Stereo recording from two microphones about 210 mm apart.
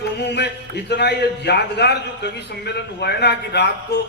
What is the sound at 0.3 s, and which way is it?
A man's voice, 55° left (ahead or behind).